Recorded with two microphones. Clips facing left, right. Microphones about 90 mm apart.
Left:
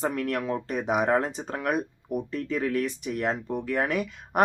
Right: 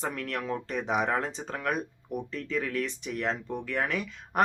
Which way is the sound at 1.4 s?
25° left (ahead or behind).